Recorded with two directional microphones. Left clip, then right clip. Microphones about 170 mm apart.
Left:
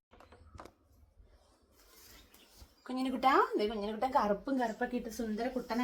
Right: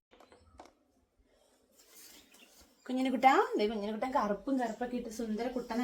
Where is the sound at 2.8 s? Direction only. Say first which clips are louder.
Right 4 dB; 25° right (ahead or behind).